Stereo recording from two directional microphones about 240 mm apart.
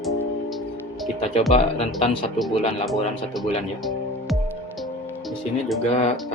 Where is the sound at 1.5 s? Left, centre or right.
Left.